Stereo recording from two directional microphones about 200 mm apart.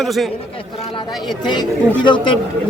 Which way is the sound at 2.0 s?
25° left (ahead or behind).